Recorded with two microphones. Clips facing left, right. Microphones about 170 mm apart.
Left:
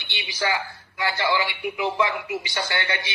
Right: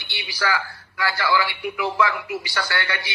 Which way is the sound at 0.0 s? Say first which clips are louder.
Even; 20° left (ahead or behind).